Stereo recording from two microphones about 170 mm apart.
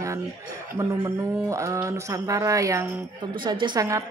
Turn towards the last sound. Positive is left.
turn(degrees=-20)  # may be behind; listen again after turning